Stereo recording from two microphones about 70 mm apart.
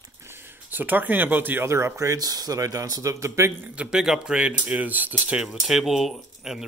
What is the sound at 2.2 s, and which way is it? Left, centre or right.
Speech, right.